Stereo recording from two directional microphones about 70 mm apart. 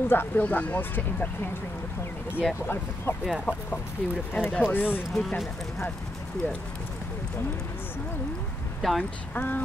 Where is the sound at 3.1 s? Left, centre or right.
Left.